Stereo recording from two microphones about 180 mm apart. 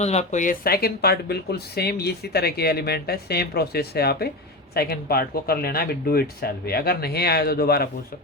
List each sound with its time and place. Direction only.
0.0 s speech: 40° left (ahead or behind); by 7.9 s 60° left (ahead or behind)